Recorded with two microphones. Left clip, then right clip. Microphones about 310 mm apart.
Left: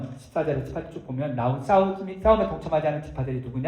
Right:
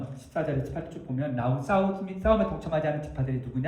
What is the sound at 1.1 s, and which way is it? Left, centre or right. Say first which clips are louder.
Speech: left 3 dB; centre.